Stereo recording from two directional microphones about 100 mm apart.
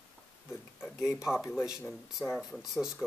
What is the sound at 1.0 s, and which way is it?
Speech, 5° right (ahead or behind).